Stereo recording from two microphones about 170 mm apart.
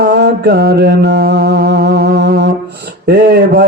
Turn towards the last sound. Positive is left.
turn(degrees=-70)  # may be behind; listen again after turning